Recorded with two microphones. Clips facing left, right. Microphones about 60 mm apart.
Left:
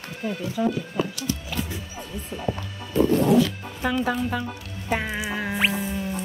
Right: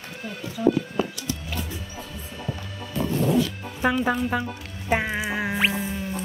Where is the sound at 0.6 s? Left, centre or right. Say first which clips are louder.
Right 3 dB; left.